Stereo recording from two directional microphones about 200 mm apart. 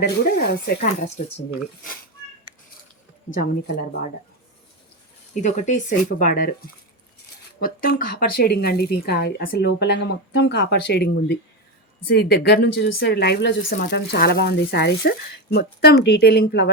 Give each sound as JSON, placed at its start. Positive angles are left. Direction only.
{"t": 0.0, "sound": "speech", "side_deg": 50}
{"t": 5.3, "sound": "speech", "side_deg": 40}
{"t": 7.6, "sound": "a woman's voice", "side_deg": 45}